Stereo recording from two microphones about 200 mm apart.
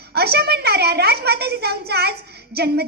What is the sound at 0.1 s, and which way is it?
A woman's voice, 55° right (ahead or behind).